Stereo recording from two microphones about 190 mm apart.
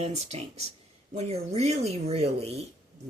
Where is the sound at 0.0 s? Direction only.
35° right (ahead or behind).